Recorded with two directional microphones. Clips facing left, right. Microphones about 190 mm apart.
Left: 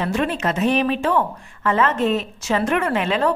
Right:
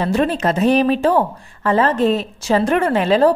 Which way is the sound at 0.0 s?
35° right (ahead or behind).